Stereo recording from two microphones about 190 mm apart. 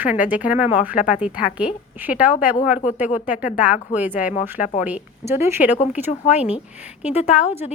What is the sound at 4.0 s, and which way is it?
A woman's voice, 10° right (ahead or behind).